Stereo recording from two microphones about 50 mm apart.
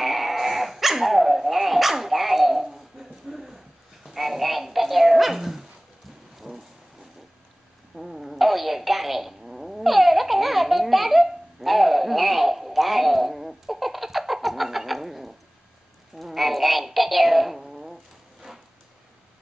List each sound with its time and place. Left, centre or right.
0.0 s dog: centre
6.5 s a sound: right
7.9 s fart: centre
16.2 s synthetic singing: centre